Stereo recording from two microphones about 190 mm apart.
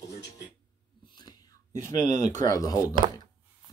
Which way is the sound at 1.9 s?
40° right (ahead or behind).